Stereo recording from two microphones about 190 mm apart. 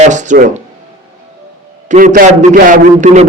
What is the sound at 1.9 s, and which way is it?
A man's voice, 40° right (ahead or behind).